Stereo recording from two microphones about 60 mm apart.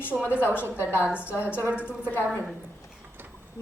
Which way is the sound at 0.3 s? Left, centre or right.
Left.